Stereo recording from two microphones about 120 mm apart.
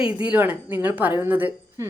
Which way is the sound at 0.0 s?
45° left (ahead or behind).